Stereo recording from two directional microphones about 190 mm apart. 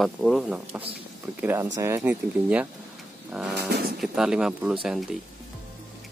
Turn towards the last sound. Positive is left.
turn(degrees=0)  # may be behind; listen again after turning